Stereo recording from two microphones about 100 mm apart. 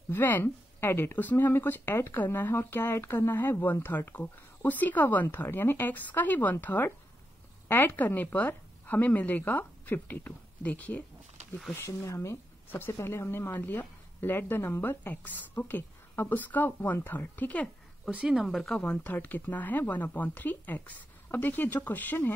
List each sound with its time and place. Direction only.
0.1 s speech: 20° left (ahead or behind)
11.7 s speech: 25° left (ahead or behind)
18.1 s speech: 5° right (ahead or behind)
18.8 s speech: 15° left (ahead or behind)